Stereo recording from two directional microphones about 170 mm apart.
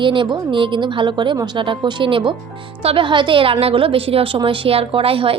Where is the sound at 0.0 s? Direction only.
30° right (ahead or behind).